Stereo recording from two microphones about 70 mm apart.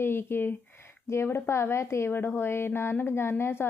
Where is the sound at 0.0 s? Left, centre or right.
Left.